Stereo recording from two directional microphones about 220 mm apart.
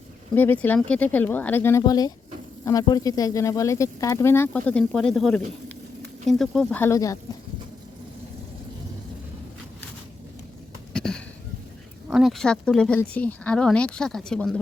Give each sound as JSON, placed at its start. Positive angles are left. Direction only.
{"t": 0.3, "sound": "speech", "side_deg": 10}
{"t": 10.9, "sound": "a sound", "side_deg": 0}
{"t": 12.0, "sound": "speech", "side_deg": 0}